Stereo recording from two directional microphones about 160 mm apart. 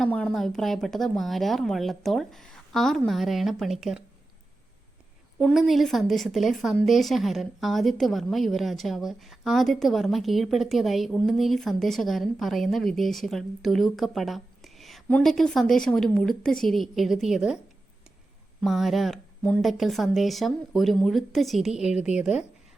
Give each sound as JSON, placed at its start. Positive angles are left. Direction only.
{"t": 0.0, "sound": "a woman's voice", "side_deg": 5}
{"t": 5.4, "sound": "a woman's voice", "side_deg": 0}
{"t": 18.6, "sound": "a woman's voice", "side_deg": 0}